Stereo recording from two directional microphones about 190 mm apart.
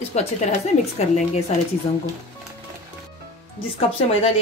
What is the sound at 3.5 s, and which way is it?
Speech, 30° left (ahead or behind).